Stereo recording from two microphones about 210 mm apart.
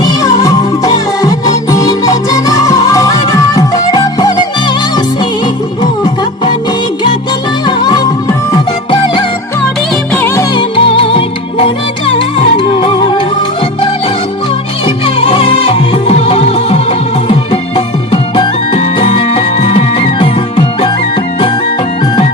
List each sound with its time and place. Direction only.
0.0 s music: 20° left (ahead or behind)
7.6 s music: 20° left (ahead or behind)
9.9 s music: 5° left (ahead or behind)
10.5 s music: 25° left (ahead or behind)
14.8 s music: 30° left (ahead or behind)